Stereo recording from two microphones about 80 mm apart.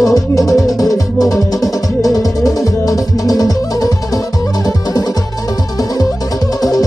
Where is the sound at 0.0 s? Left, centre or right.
Left.